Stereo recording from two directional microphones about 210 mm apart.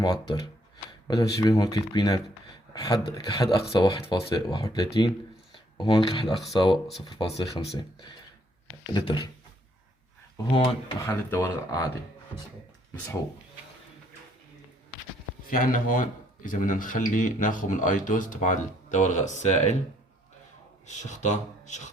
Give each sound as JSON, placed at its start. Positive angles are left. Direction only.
{"t": 0.0, "sound": "speech", "side_deg": 20}
{"t": 6.2, "sound": "speech", "side_deg": 0}
{"t": 7.0, "sound": "speech", "side_deg": 25}
{"t": 8.9, "sound": "speech", "side_deg": 20}
{"t": 10.3, "sound": "speech", "side_deg": 25}
{"t": 11.0, "sound": "speech", "side_deg": 10}
{"t": 15.4, "sound": "speech", "side_deg": 40}
{"t": 20.8, "sound": "speech", "side_deg": 35}